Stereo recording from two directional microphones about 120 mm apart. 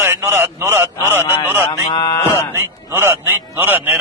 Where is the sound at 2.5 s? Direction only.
20° right (ahead or behind).